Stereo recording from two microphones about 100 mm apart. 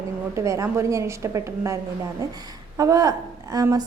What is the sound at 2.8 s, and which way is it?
A woman's voice, 35° right (ahead or behind).